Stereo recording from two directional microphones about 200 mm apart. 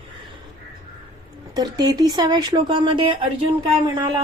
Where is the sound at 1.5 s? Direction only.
20° right (ahead or behind).